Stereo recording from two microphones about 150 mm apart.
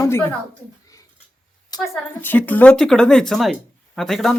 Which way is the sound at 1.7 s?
25° left (ahead or behind).